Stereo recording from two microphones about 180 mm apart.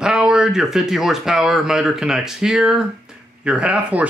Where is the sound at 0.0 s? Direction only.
5° right (ahead or behind).